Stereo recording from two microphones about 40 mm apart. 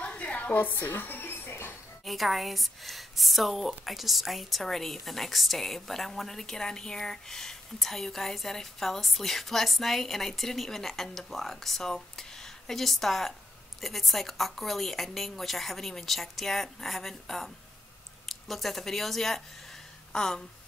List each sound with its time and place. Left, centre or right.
0.0 s a sound: left
0.7 s music: left
2.0 s a woman's voice: centre